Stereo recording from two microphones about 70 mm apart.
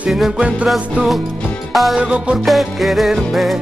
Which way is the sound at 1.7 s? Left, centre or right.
Centre.